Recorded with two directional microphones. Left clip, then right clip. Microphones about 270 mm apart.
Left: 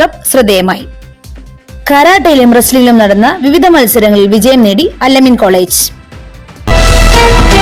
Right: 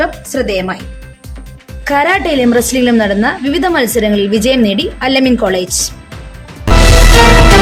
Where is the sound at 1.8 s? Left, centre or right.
Left.